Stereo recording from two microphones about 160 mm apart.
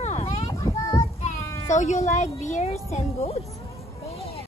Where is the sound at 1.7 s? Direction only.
50° left (ahead or behind).